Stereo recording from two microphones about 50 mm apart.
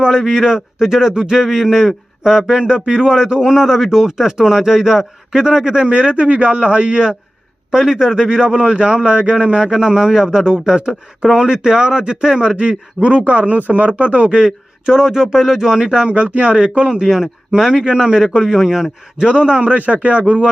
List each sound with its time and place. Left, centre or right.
0.0 s a man's voice: centre
16.0 s a man's voice: right
16.9 s a man's voice: centre
19.1 s a man's voice: centre